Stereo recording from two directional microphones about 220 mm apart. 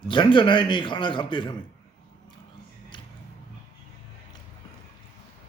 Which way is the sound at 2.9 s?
20° left (ahead or behind).